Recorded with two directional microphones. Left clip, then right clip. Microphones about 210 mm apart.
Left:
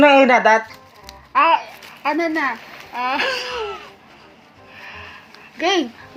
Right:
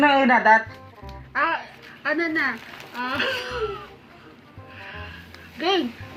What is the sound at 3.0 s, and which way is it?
Speech, 35° left (ahead or behind).